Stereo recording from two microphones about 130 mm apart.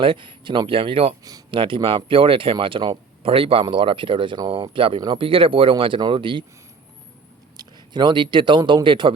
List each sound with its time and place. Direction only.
0.0 s speech: 40° right (ahead or behind)
1.2 s speech: 30° right (ahead or behind)
1.5 s speech: 40° right (ahead or behind)
7.5 s a man's voice: 30° right (ahead or behind)